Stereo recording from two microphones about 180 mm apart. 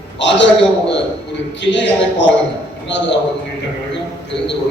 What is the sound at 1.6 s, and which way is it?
Speech, 85° left.